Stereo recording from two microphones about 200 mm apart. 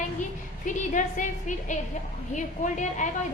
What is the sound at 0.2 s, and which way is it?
A woman's voice, 40° left (ahead or behind).